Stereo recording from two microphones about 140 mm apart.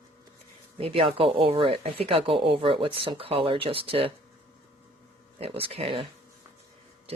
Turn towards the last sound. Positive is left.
turn(degrees=-40)  # may be behind; listen again after turning